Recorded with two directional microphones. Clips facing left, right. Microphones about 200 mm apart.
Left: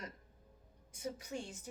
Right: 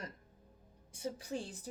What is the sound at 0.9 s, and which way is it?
Speech, 30° right (ahead or behind).